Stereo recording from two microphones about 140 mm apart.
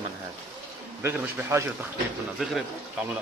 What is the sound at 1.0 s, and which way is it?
Speech, 15° right (ahead or behind).